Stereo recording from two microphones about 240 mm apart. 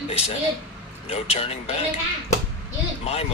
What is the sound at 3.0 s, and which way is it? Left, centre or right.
Speech, left.